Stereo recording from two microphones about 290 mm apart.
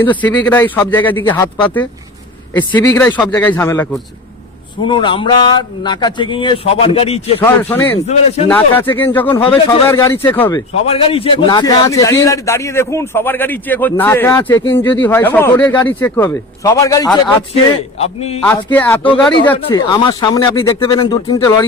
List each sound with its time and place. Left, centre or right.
0.0 s a man's voice: centre
7.4 s a man's voice: centre
8.0 s a man's voice: left
8.4 s a man's voice: centre
10.8 s a man's voice: centre
18.4 s a man's voice: centre
19.5 s a man's voice: centre